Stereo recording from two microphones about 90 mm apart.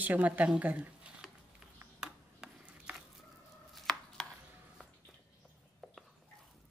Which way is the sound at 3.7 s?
5° left (ahead or behind).